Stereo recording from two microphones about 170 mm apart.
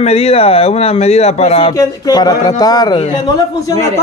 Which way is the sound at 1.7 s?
20° left (ahead or behind).